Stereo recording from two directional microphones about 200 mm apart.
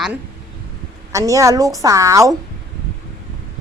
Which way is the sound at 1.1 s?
15° right (ahead or behind).